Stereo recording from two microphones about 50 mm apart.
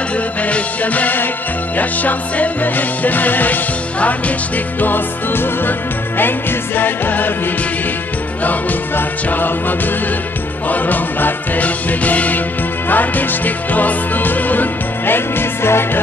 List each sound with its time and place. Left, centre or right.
0.5 s music: left
8.5 s music: left